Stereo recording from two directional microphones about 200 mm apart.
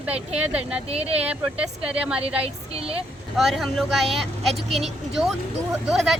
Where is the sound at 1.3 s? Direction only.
5° right (ahead or behind).